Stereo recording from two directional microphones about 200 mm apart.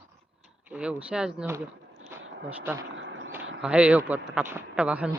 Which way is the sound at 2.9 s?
65° right (ahead or behind).